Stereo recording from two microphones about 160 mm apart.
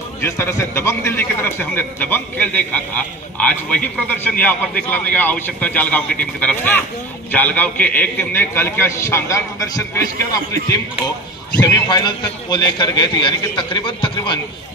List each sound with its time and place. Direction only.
0.2 s a man's voice: 15° left (ahead or behind)